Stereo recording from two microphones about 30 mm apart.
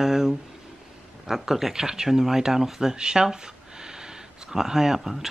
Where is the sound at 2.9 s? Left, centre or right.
Right.